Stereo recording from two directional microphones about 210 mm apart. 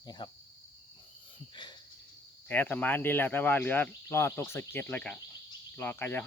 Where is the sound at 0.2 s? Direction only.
20° left (ahead or behind).